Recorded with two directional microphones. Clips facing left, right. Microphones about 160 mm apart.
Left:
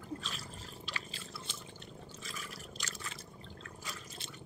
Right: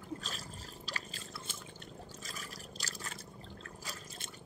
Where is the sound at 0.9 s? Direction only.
40° right (ahead or behind).